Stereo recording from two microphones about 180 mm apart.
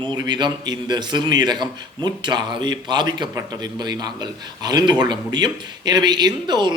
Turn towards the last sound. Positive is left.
turn(degrees=-25)  # may be behind; listen again after turning